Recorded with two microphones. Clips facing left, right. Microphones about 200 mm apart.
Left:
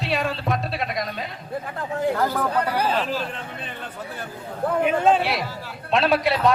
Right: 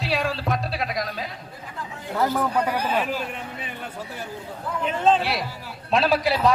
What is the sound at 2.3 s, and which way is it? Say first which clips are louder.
Speech: even; 10° right (ahead or behind).